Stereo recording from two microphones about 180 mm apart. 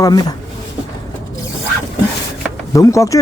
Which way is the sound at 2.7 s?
20° left (ahead or behind).